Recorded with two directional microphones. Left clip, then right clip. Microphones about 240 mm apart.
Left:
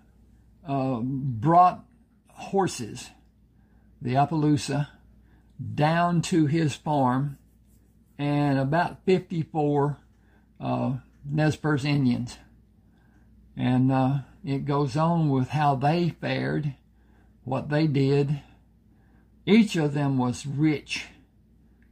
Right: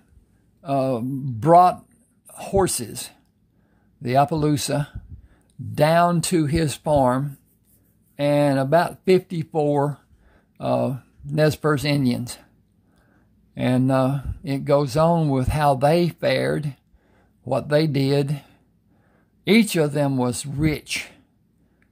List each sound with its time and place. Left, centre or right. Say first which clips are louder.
0.6 s speech: right 6 dB; right
13.6 s speech: right 5 dB; right